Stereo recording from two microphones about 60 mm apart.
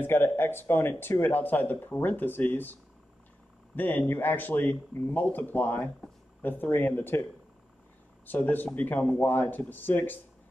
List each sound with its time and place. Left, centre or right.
0.0 s speech: left
8.3 s speech: left